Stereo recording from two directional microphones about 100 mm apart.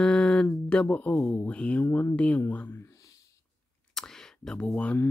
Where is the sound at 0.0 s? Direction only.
10° left (ahead or behind).